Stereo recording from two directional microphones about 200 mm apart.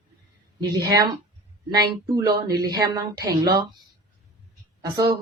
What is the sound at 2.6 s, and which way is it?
A woman's voice, 20° right (ahead or behind).